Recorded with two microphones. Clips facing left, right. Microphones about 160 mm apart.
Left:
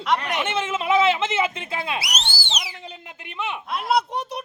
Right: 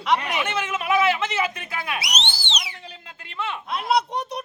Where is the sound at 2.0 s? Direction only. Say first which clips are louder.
Even; 5° left (ahead or behind).